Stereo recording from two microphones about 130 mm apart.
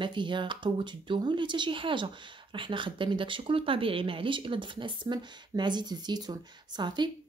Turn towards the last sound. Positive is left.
turn(degrees=-35)  # may be behind; listen again after turning